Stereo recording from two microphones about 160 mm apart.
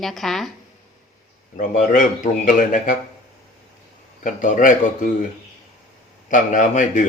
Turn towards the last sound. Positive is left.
turn(degrees=50)  # may be behind; listen again after turning